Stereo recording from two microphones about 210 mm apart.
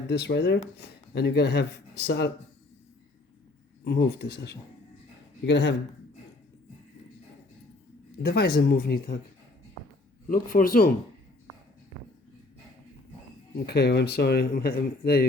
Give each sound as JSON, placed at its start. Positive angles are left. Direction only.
{"t": 0.1, "sound": "speech", "side_deg": 50}
{"t": 3.8, "sound": "a man's voice", "side_deg": 50}
{"t": 8.2, "sound": "speech", "side_deg": 50}
{"t": 10.2, "sound": "a man's voice", "side_deg": 40}
{"t": 13.7, "sound": "speech", "side_deg": 50}